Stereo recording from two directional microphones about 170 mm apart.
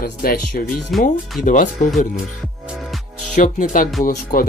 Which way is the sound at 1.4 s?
50° left (ahead or behind).